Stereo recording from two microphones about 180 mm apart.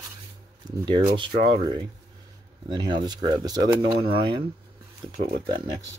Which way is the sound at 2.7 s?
25° right (ahead or behind).